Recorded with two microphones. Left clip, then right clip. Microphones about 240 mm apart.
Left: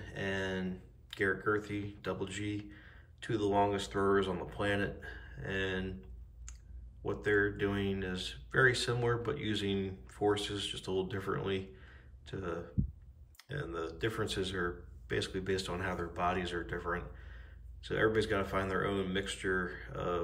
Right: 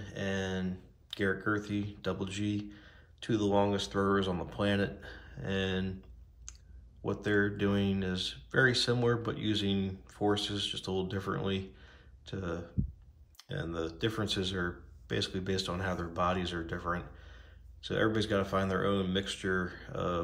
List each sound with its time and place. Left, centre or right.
0.0 s a sound: centre
1.1 s speech: centre
7.1 s speech: centre